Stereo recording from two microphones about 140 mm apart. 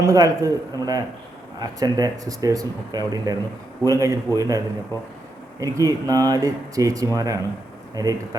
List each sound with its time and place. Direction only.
0.0 s speech: 25° right (ahead or behind)